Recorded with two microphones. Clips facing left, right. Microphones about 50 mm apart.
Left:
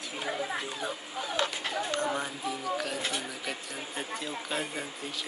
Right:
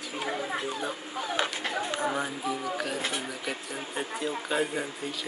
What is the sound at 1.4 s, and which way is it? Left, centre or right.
Chatter, centre.